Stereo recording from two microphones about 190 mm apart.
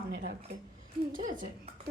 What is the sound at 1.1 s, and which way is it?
Speech, 45° right (ahead or behind).